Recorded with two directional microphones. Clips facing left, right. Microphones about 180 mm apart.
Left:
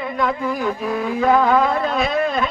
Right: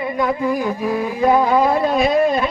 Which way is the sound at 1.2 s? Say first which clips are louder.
Right 1 dB; 15° right (ahead or behind).